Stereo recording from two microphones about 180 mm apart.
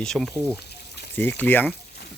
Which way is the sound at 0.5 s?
65° left (ahead or behind).